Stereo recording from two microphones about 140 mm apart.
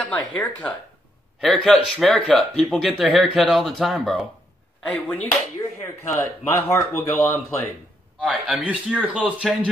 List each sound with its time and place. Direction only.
0.3 s speech: 10° left (ahead or behind)
5.0 s speech: 10° left (ahead or behind)
8.2 s a man's voice: 10° right (ahead or behind)